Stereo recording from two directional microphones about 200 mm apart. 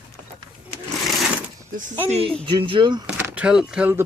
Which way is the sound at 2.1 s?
30° right (ahead or behind).